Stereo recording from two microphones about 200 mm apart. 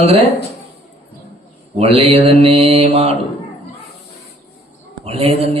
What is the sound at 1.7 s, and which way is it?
Music, 30° right (ahead or behind).